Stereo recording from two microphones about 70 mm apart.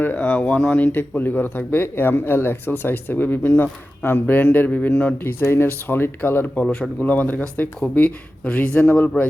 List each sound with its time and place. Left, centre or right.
0.0 s speech: left
5.1 s speech: left